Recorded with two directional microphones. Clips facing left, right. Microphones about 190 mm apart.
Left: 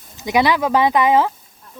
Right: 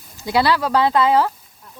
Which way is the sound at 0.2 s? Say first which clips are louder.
Left 1 dB; 20° left (ahead or behind).